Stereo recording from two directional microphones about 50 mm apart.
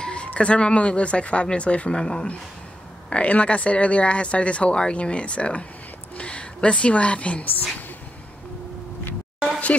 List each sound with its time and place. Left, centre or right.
0.0 s a woman's voice: left